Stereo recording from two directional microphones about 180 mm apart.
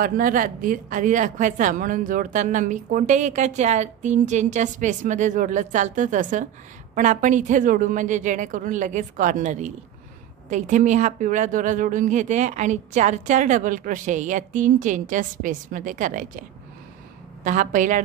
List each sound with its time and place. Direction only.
0.0 s speech: 50° right (ahead or behind)